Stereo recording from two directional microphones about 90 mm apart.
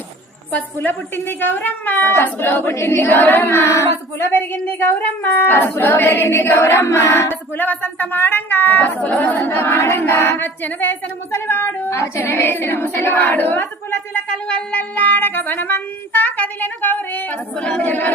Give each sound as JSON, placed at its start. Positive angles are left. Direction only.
{"t": 0.5, "sound": "a capella", "side_deg": 20}